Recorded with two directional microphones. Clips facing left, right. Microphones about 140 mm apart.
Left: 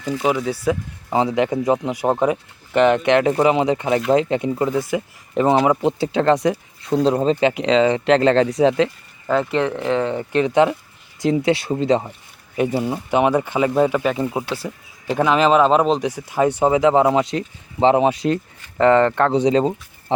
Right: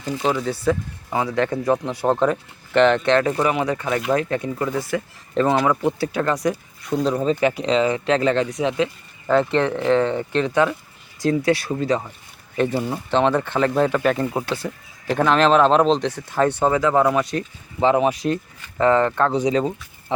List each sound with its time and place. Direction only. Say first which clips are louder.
0.2 s speech: left 1 dB; 10° left (ahead or behind)
1.1 s speech: left 3 dB; 20° left (ahead or behind)
9.2 s speech: right 1 dB; 5° left (ahead or behind); by 12.1 s 25° left (ahead or behind)
12.5 s speech: left 1 dB; 10° left (ahead or behind); by 18.3 s 30° left (ahead or behind)
18.9 s speech: left 3 dB; 65° left (ahead or behind)
19.1 s speech: left 3 dB; 30° left (ahead or behind)